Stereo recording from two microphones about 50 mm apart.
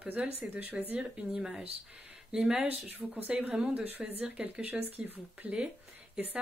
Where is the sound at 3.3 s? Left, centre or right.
Right.